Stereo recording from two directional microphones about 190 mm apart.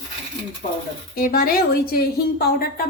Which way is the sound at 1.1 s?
50° left (ahead or behind).